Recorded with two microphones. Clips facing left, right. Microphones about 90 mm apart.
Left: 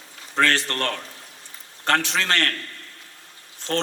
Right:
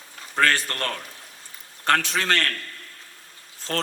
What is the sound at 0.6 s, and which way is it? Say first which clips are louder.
Mantra: left 3 dB; 25° left (ahead or behind).